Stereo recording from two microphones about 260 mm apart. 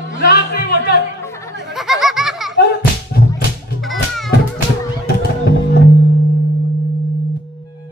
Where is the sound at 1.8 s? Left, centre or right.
Centre.